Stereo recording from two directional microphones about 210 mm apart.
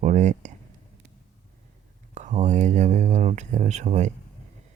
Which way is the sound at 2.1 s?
35° right (ahead or behind).